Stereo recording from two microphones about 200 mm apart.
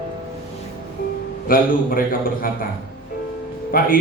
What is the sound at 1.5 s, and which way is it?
A man's voice, 45° left (ahead or behind).